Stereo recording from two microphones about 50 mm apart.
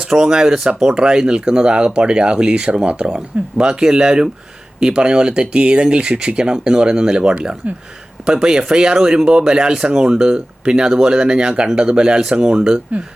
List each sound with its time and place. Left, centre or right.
0.1 s speech: centre